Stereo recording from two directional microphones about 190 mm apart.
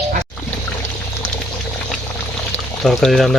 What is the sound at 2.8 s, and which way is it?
Speech, centre (ahead or behind).